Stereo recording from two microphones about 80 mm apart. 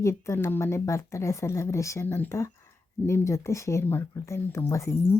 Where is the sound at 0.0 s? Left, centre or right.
Left.